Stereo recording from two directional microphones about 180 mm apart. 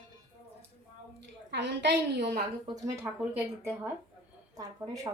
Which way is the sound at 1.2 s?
75° right (ahead or behind).